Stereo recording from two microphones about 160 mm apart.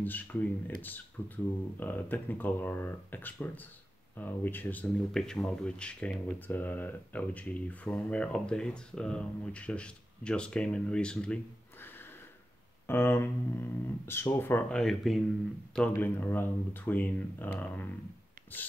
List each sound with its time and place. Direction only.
0.0 s speech: 10° left (ahead or behind)
12.8 s speech: 15° left (ahead or behind)